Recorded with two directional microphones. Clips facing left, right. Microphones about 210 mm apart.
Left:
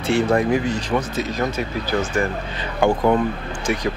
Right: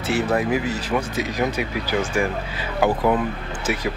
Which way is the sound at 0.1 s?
5° right (ahead or behind).